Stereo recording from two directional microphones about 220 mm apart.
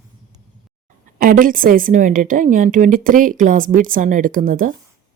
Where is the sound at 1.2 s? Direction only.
40° right (ahead or behind).